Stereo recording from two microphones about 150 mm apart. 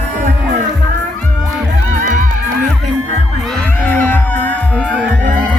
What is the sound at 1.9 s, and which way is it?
Music, 60° right (ahead or behind).